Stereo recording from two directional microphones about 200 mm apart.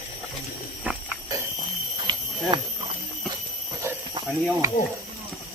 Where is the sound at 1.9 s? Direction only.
25° right (ahead or behind).